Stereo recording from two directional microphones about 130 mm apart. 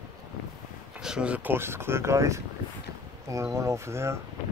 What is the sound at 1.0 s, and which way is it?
Speech, 5° right (ahead or behind).